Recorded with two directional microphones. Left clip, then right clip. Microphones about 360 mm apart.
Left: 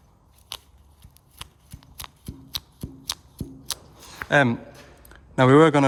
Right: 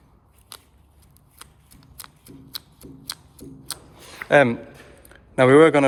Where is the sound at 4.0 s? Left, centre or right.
Centre.